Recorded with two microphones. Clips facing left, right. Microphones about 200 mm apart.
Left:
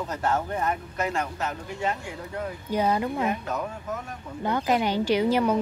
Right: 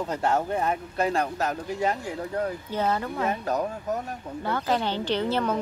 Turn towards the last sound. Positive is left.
turn(degrees=10)  # may be behind; listen again after turning